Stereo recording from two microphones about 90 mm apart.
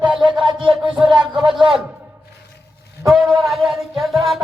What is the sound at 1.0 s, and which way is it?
Speech, 60° right (ahead or behind).